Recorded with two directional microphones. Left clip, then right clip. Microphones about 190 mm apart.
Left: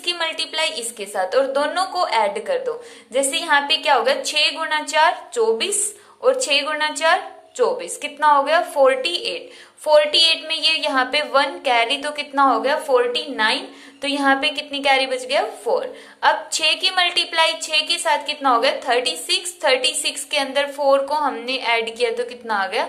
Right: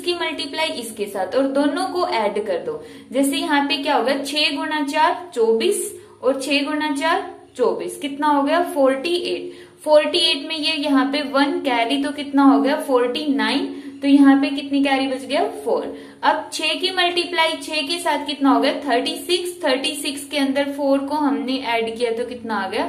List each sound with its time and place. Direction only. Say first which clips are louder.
0.0 s a woman's voice: even; 30° left (ahead or behind)